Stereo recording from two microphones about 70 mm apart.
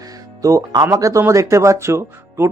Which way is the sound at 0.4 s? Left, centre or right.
Right.